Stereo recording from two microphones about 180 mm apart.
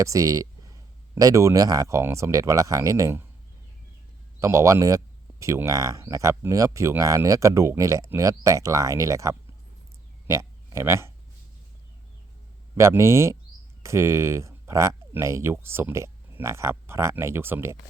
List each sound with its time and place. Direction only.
0.0 s speech: 20° right (ahead or behind)
4.4 s speech: 15° right (ahead or behind)
12.7 s speech: 15° right (ahead or behind)